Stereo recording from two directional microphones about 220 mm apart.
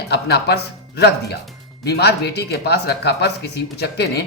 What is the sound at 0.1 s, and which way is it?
Speech, 50° left (ahead or behind).